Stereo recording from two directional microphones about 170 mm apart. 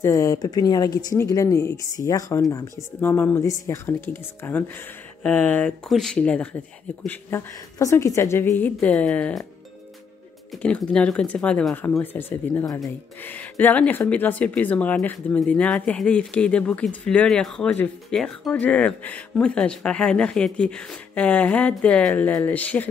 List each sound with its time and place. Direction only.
0.0 s speech: 20° left (ahead or behind)
10.5 s speech: 5° left (ahead or behind)